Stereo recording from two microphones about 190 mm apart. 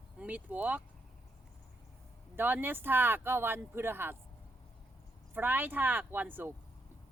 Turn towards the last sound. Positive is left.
turn(degrees=-10)  # may be behind; listen again after turning